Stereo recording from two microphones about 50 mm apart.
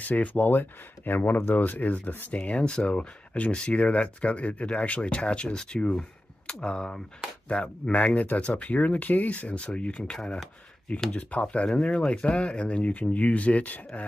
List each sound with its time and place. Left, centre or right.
0.0 s speech: left
11.1 s speech: left